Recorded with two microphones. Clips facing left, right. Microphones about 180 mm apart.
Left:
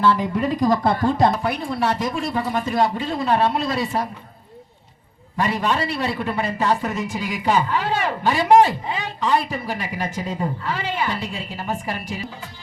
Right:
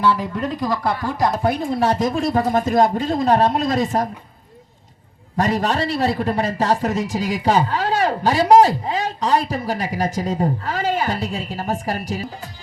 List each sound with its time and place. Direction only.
0.3 s speech: 10° left (ahead or behind); by 1.3 s 25° left (ahead or behind)
1.4 s speech: 40° right (ahead or behind)
5.4 s a man's voice: 40° right (ahead or behind)